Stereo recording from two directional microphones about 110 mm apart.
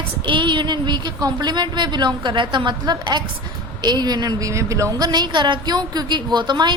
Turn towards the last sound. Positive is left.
turn(degrees=-45)  # may be behind; listen again after turning